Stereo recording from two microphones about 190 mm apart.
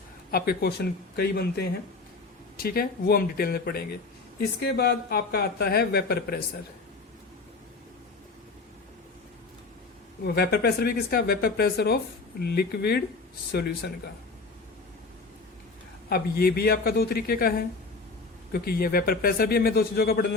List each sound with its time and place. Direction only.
0.3 s a man's voice: 50° left (ahead or behind)
10.2 s speech: 55° left (ahead or behind)
16.0 s a man's voice: 55° left (ahead or behind)